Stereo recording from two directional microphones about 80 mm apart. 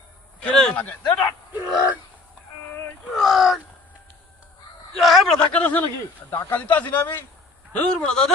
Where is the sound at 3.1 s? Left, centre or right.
Centre.